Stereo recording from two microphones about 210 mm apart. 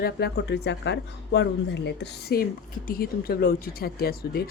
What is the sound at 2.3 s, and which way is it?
Speech, 45° left (ahead or behind).